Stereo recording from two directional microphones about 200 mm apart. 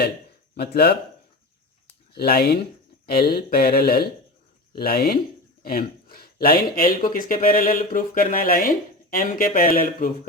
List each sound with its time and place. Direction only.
0.5 s speech: 55° left (ahead or behind)
2.1 s speech: 50° left (ahead or behind)